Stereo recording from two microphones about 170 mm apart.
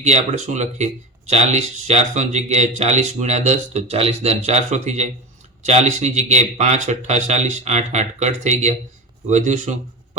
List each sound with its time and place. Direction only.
0.0 s speech: 40° right (ahead or behind)